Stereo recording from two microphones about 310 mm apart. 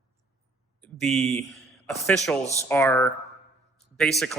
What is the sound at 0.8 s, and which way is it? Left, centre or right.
Speech, centre.